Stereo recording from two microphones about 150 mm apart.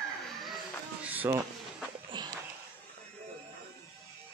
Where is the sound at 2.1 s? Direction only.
30° right (ahead or behind).